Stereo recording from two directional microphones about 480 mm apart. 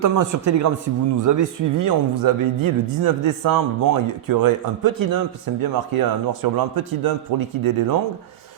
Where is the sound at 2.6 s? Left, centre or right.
Right.